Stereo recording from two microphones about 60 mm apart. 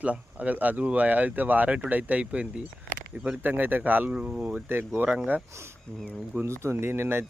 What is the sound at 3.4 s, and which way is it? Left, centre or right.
Speech, right.